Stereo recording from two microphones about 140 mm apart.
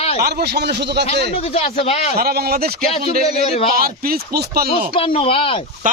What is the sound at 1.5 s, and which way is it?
Speech, 45° left (ahead or behind).